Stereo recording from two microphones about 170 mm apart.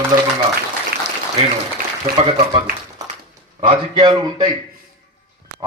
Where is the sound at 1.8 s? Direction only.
60° right (ahead or behind).